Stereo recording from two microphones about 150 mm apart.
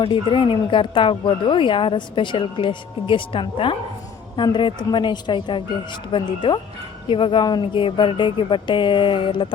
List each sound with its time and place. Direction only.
0.0 s speech: 35° left (ahead or behind)